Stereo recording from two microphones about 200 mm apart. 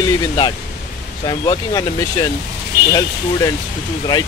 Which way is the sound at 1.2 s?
20° left (ahead or behind).